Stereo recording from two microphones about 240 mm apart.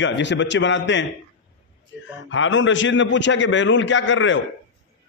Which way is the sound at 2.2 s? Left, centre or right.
Left.